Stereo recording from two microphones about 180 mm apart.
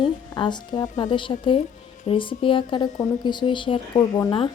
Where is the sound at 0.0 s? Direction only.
25° left (ahead or behind).